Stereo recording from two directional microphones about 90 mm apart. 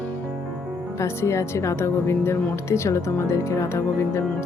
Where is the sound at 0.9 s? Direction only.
30° left (ahead or behind).